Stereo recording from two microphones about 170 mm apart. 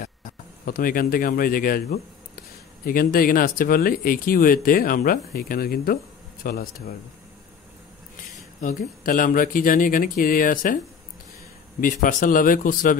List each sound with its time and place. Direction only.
0.0 s speech: 55° left (ahead or behind)
8.5 s speech: 50° left (ahead or behind)
11.8 s speech: 50° left (ahead or behind)